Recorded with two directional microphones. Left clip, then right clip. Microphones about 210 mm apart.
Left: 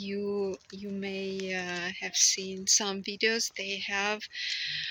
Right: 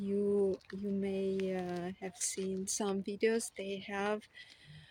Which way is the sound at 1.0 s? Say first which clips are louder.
Left 1 dB; 15° right (ahead or behind).